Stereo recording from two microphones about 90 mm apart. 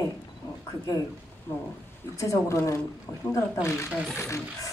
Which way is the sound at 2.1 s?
35° left (ahead or behind).